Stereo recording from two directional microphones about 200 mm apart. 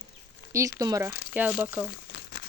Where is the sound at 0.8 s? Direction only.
15° right (ahead or behind).